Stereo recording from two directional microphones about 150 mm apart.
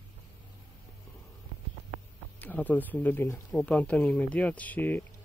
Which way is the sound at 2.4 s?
10° left (ahead or behind).